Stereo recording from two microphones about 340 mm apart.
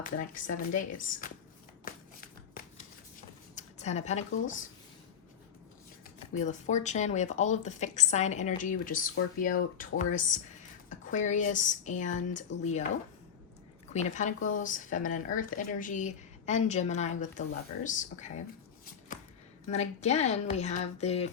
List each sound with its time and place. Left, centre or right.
0.0 s a woman's voice: left
3.5 s speech: centre
6.3 s a woman's voice: left
13.9 s a woman's voice: left
19.1 s a sound: left
19.6 s a woman's voice: centre